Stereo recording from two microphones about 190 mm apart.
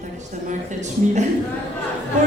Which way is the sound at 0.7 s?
40° right (ahead or behind).